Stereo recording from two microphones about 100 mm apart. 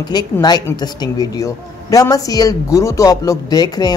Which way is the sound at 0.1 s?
45° left (ahead or behind).